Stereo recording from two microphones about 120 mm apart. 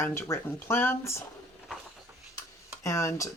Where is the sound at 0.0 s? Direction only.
25° left (ahead or behind).